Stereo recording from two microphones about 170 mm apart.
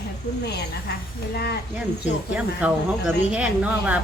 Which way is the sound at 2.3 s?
5° right (ahead or behind).